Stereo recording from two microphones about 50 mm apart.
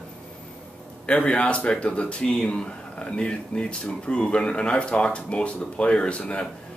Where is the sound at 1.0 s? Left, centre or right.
Left.